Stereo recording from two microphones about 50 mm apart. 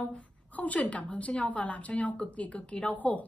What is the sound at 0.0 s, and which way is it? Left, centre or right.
A woman's voice, left.